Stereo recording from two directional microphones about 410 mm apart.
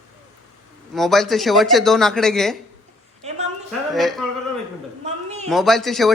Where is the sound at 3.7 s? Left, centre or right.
Centre.